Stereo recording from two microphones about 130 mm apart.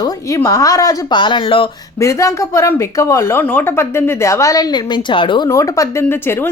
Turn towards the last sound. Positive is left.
turn(degrees=20)  # may be behind; listen again after turning